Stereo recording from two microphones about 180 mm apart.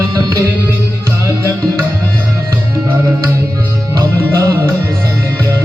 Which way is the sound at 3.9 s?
20° right (ahead or behind).